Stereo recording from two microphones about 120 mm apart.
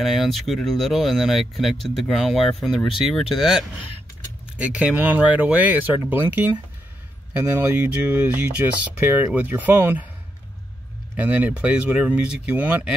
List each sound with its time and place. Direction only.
0.0 s speech: centre (ahead or behind); by 10.0 s 15° right (ahead or behind)
11.1 s speech: 10° right (ahead or behind)